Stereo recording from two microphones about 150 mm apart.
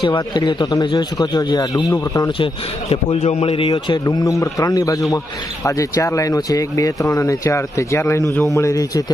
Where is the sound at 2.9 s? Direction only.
45° left (ahead or behind).